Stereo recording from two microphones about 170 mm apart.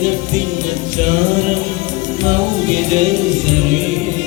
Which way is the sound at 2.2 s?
45° right (ahead or behind).